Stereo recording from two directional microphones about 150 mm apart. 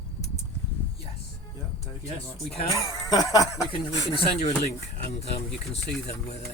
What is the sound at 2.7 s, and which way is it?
Speech, 20° left (ahead or behind).